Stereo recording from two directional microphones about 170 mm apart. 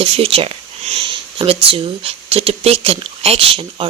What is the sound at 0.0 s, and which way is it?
Speech, 35° right (ahead or behind).